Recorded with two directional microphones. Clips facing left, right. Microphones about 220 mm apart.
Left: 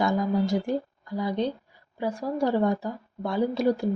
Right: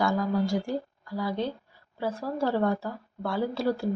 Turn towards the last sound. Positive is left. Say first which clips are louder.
# left 4 dB
turn(degrees=15)  # may be behind; listen again after turning